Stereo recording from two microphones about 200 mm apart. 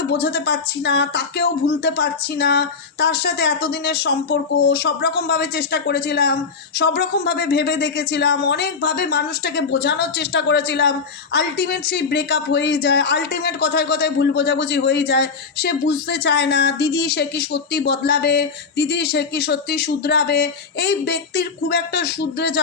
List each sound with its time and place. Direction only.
0.1 s speech: 55° left (ahead or behind)